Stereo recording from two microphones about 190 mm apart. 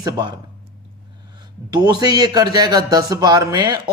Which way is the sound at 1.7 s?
20° right (ahead or behind).